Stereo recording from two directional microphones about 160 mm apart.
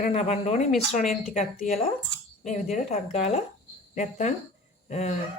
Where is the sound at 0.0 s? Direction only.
45° left (ahead or behind).